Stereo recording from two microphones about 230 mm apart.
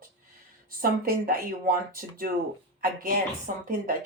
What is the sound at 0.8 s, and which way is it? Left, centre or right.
Speech, right.